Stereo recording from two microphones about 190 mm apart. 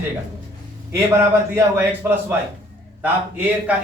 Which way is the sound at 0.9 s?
15° right (ahead or behind).